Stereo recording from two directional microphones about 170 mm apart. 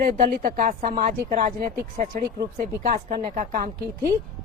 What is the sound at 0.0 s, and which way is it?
A woman's voice, 55° right (ahead or behind).